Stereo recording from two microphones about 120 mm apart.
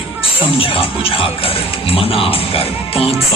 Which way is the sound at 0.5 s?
50° left (ahead or behind).